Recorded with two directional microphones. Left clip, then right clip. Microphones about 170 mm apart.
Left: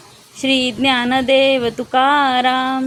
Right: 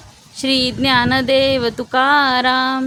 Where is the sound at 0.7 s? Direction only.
10° right (ahead or behind).